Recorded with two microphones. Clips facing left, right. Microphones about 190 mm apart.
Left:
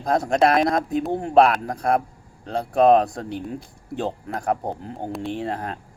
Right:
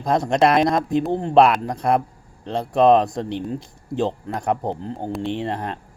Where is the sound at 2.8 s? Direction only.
5° left (ahead or behind).